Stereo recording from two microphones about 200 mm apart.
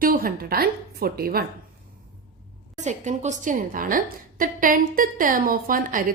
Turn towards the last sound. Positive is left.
turn(degrees=-45)  # may be behind; listen again after turning